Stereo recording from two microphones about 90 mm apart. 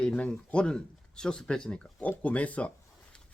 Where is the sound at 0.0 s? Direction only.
10° left (ahead or behind).